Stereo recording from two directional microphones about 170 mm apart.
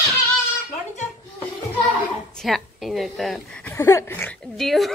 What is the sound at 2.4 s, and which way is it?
Speech, centre (ahead or behind).